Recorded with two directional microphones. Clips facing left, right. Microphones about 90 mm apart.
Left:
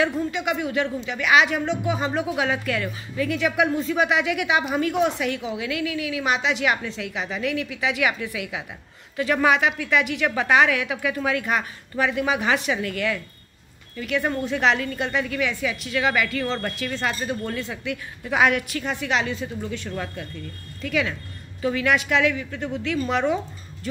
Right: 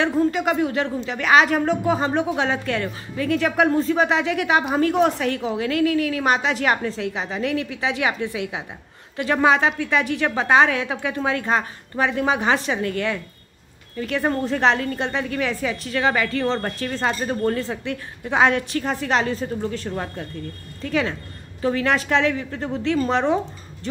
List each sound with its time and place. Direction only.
0.0 s speech: 40° right (ahead or behind)